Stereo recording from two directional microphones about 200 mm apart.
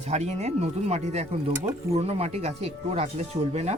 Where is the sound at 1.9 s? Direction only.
30° right (ahead or behind).